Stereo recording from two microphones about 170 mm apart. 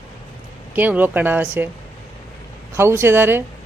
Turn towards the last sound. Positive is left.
turn(degrees=-15)  # may be behind; listen again after turning